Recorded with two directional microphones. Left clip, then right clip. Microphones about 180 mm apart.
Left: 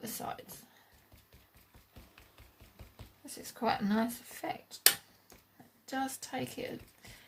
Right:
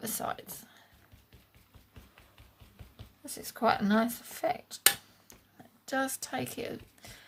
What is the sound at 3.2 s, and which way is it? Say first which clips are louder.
Speech: right 6 dB; 45° right (ahead or behind).